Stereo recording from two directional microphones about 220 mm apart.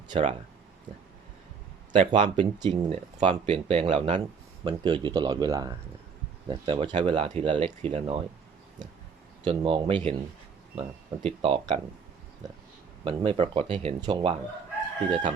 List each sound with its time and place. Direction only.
0.1 s speech: 25° right (ahead or behind)
0.9 s a sound: 35° right (ahead or behind)
1.9 s speech: 25° right (ahead or behind)
9.4 s speech: 25° right (ahead or behind)
13.1 s speech: 25° right (ahead or behind)